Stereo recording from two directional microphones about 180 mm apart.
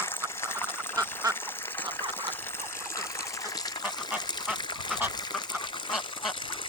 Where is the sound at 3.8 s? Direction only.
5° right (ahead or behind).